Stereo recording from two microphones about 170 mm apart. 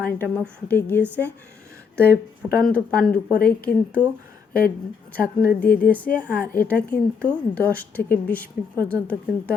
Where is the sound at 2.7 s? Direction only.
5° left (ahead or behind).